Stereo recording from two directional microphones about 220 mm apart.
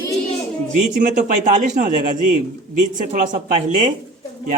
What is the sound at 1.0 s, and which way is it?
Speech, 35° right (ahead or behind).